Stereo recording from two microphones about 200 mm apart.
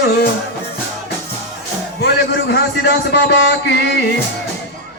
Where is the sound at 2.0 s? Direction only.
55° left (ahead or behind).